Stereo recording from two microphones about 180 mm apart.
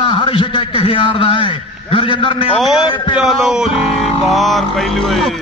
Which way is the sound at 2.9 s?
30° left (ahead or behind).